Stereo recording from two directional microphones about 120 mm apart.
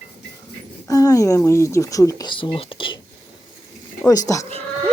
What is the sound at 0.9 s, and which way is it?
Speech, 30° left (ahead or behind).